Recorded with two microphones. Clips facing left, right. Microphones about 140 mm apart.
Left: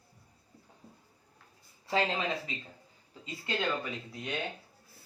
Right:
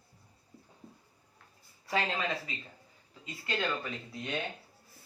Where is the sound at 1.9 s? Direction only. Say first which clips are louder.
Left 2 dB; 25° left (ahead or behind).